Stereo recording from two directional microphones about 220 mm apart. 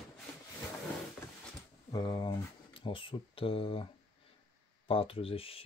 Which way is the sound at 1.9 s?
20° left (ahead or behind).